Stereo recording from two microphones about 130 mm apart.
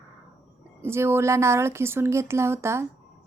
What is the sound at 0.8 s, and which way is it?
Speech, 20° right (ahead or behind).